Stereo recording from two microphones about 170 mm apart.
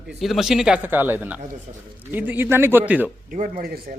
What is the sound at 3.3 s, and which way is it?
Speech, 55° right (ahead or behind).